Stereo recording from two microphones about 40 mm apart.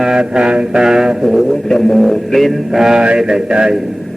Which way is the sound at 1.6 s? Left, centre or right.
Centre.